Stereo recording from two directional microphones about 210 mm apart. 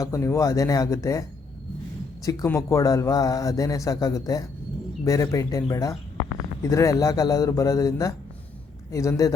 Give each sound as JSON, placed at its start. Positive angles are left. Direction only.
{"t": 0.0, "sound": "speech", "side_deg": 15}
{"t": 2.2, "sound": "speech", "side_deg": 15}